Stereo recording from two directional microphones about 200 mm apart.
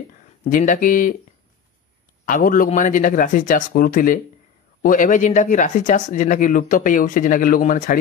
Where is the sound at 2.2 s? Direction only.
45° left (ahead or behind).